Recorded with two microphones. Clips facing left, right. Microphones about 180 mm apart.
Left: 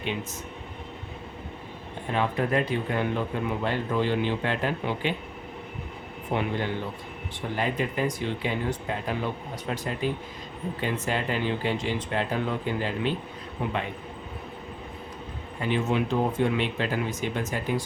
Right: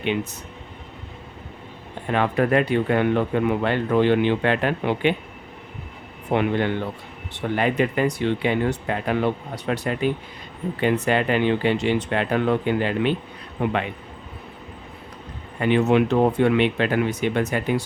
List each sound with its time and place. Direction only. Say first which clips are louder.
2.0 s speech: right 6 dB; 70° right (ahead or behind)
6.3 s speech: right 7 dB; 65° right (ahead or behind)
15.6 s speech: right 8 dB; 70° right (ahead or behind)